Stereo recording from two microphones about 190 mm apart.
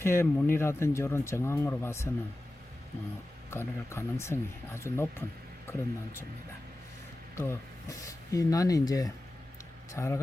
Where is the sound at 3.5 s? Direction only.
15° left (ahead or behind).